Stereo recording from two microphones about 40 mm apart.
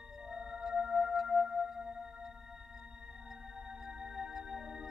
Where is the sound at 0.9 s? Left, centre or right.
Centre.